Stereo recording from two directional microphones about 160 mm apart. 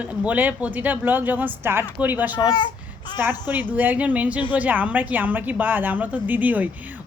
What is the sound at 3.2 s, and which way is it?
Speech, 10° right (ahead or behind).